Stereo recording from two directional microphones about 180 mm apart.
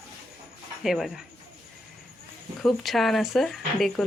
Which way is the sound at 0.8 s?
Centre (ahead or behind).